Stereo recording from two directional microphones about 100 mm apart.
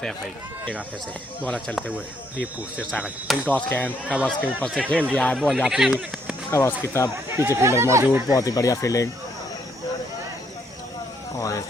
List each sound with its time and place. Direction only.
1.4 s speech: 15° left (ahead or behind)
3.0 s speech: centre (ahead or behind)
3.5 s speech: 15° left (ahead or behind)
4.0 s speech: 10° right (ahead or behind)
4.3 s speech: 10° left (ahead or behind)
6.7 s speech: 25° left (ahead or behind)
7.3 s speech: 25° right (ahead or behind)
8.3 s speech: 35° left (ahead or behind)
11.3 s speech: 35° left (ahead or behind)